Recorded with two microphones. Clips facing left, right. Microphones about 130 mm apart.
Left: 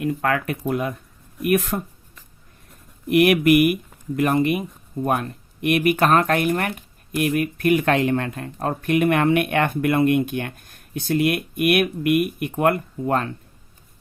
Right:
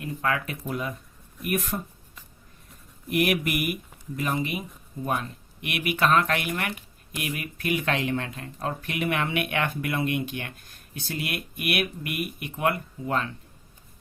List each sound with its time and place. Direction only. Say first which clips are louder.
0.0 s speech: left 6 dB; 60° left (ahead or behind)
3.1 s speech: left 9 dB; 65° left (ahead or behind)